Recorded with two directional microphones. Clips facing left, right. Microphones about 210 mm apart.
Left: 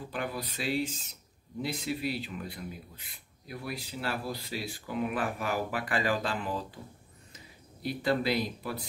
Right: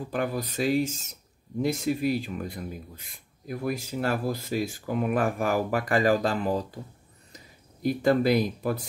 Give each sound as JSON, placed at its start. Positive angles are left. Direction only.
{"t": 0.1, "sound": "speech", "side_deg": -45}
{"t": 7.8, "sound": "speech", "side_deg": -45}